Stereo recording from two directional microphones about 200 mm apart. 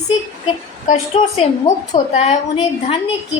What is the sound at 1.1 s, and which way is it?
A woman's voice, 30° left (ahead or behind).